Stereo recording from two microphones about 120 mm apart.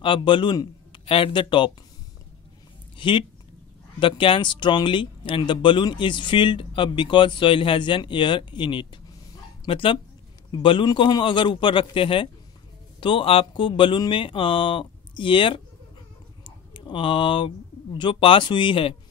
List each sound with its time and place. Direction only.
0.0 s a man's voice: 45° left (ahead or behind)
3.0 s speech: 45° left (ahead or behind)
16.4 s a sound: 45° left (ahead or behind)
17.9 s speech: 45° left (ahead or behind)